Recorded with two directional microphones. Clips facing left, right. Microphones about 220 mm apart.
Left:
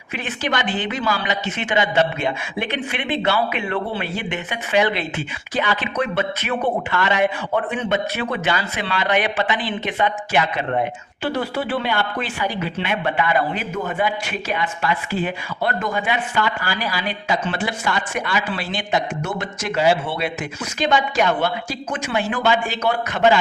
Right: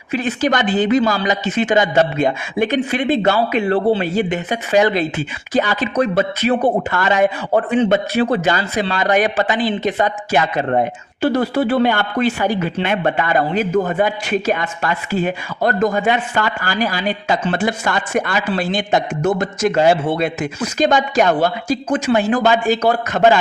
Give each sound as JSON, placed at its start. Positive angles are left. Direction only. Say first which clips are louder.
{"t": 0.1, "sound": "speech", "louder": "right 7 dB", "side_deg": -40}